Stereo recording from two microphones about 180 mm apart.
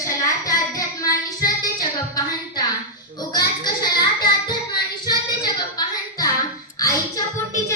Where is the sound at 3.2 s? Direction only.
20° left (ahead or behind).